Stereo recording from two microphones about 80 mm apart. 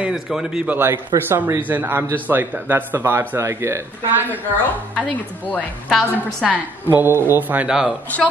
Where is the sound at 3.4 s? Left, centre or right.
Right.